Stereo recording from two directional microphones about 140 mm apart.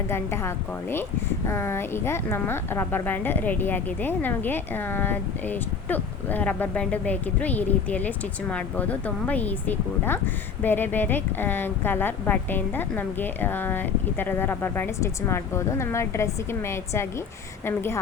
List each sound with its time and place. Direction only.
0.1 s a woman's voice: 20° left (ahead or behind)